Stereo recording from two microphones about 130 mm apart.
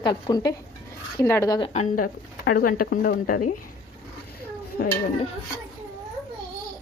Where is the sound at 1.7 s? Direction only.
75° left (ahead or behind).